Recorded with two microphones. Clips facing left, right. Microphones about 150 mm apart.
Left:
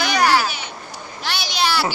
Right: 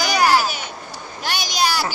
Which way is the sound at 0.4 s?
45° right (ahead or behind).